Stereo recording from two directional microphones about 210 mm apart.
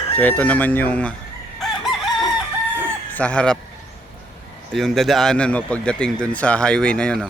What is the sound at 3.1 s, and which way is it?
Speech, 5° left (ahead or behind).